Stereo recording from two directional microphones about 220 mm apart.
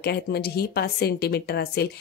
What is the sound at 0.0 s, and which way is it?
A woman's voice, 45° left (ahead or behind).